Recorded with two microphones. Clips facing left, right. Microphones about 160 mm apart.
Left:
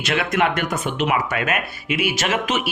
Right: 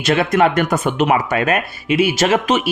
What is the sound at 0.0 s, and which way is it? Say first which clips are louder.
Speech: right 6 dB; 35° right (ahead or behind).